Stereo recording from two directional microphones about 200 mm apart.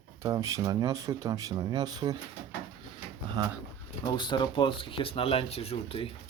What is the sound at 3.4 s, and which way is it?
Speech, 20° right (ahead or behind).